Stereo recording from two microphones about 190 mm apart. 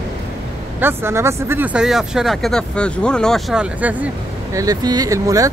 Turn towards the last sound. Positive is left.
turn(degrees=-20)  # may be behind; listen again after turning